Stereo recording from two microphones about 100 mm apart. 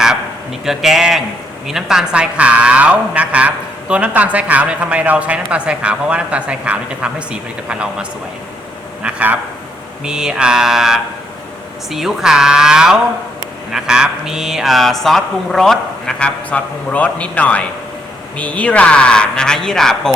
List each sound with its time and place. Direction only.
0.6 s speech: 5° right (ahead or behind)
9.0 s speech: 15° right (ahead or behind); by 20.0 s 5° left (ahead or behind)